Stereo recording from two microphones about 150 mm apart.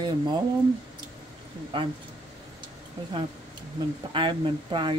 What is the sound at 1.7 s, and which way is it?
Speech, 35° right (ahead or behind).